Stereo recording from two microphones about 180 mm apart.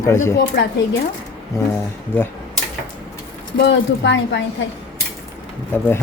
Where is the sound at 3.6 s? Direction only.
80° left.